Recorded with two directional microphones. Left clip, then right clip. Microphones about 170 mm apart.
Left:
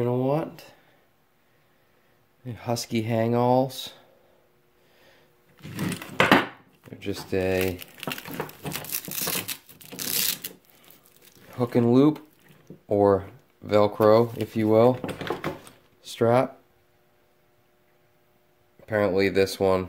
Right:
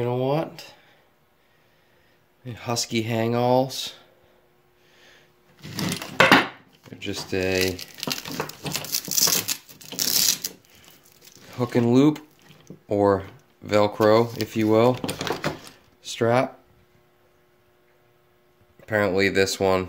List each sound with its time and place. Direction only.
0.0 s a sound: 15° left (ahead or behind)
2.4 s speech: 20° left (ahead or behind)
5.6 s a sound: 5° left (ahead or behind)
7.0 s speech: 25° left (ahead or behind)
7.5 s speech: 5° left (ahead or behind)
8.7 s a sound: 10° left (ahead or behind)
11.5 s speech: 10° left (ahead or behind)
15.0 s speech: 10° right (ahead or behind)
16.0 s speech: 20° left (ahead or behind)
18.8 s speech: 5° left (ahead or behind)